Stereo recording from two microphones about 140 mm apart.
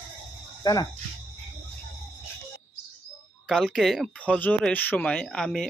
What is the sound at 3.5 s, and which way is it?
Speech, centre (ahead or behind).